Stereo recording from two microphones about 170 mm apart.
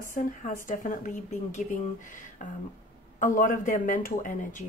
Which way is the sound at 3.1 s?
50° left (ahead or behind).